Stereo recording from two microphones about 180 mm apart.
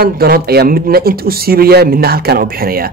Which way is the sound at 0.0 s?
60° right (ahead or behind).